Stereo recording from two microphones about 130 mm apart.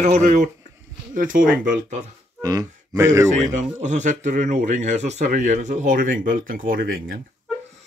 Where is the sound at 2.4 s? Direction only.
30° right (ahead or behind).